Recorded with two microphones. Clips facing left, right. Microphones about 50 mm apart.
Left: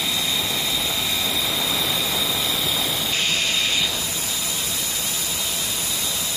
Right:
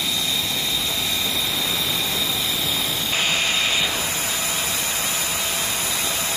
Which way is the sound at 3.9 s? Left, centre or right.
Right.